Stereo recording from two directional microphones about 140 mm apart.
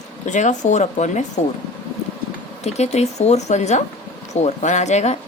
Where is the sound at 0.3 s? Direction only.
60° left (ahead or behind).